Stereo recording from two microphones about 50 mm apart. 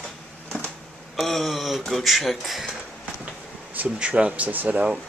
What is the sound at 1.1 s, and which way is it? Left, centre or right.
Speech, centre.